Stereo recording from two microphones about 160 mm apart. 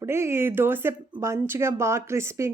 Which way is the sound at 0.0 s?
15° right (ahead or behind).